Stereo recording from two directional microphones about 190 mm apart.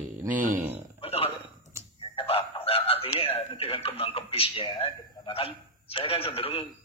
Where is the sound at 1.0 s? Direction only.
30° left (ahead or behind).